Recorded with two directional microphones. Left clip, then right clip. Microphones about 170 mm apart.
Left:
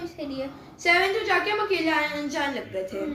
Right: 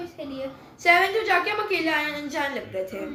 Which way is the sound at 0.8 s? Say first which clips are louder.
Right 2 dB; 25° right (ahead or behind).